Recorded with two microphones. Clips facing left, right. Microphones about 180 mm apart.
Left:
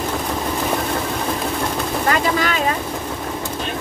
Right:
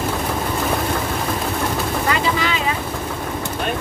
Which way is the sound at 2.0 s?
45° left (ahead or behind).